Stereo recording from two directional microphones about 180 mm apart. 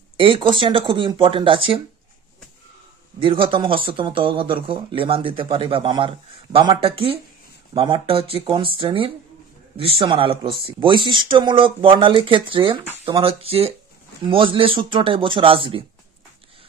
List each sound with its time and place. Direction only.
0.2 s speech: 30° right (ahead or behind)
3.2 s speech: 30° right (ahead or behind)